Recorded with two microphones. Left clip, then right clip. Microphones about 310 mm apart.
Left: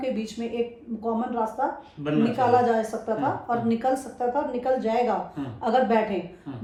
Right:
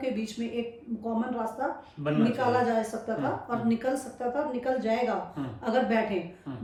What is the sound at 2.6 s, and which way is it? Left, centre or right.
A woman's voice, centre.